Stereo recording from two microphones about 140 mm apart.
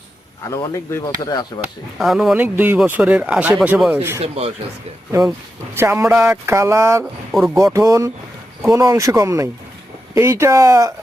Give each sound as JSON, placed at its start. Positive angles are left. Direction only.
{"t": 0.9, "sound": "speech", "side_deg": 25}
{"t": 2.0, "sound": "speech", "side_deg": 0}
{"t": 4.2, "sound": "speech", "side_deg": -50}
{"t": 5.7, "sound": "speech", "side_deg": -20}
{"t": 7.0, "sound": "speech", "side_deg": -5}
{"t": 7.5, "sound": "speech", "side_deg": -20}